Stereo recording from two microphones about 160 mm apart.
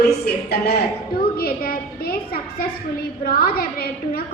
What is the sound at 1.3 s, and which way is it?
A woman's voice, 70° left (ahead or behind).